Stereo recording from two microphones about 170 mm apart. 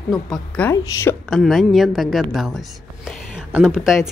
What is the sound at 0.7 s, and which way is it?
Speech, 15° left (ahead or behind).